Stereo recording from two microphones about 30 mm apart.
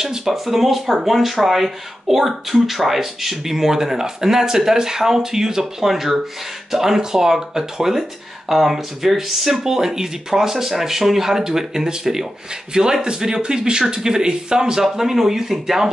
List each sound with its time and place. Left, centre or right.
0.0 s speech: centre